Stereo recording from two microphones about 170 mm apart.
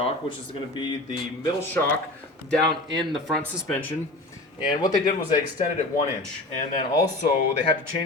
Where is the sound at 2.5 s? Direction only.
Centre (ahead or behind).